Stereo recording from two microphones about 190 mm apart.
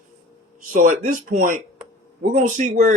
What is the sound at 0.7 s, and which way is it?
Speech, 45° right (ahead or behind).